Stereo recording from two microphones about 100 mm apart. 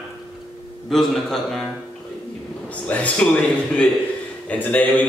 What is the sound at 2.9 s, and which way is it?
A man's voice, 15° left (ahead or behind).